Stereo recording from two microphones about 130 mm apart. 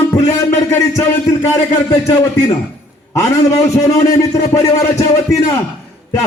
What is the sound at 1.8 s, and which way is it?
A man's voice, 35° left (ahead or behind).